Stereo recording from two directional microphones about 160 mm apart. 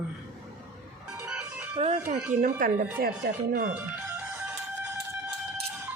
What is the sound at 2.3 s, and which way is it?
Speech, 55° right (ahead or behind).